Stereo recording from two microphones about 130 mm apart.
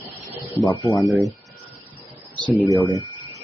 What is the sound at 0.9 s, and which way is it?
Speech, centre (ahead or behind).